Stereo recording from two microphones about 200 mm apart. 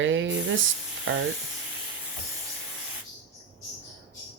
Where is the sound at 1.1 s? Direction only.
75° right (ahead or behind).